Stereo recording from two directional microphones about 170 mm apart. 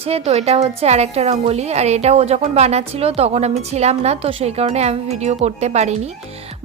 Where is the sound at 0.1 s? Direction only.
40° right (ahead or behind).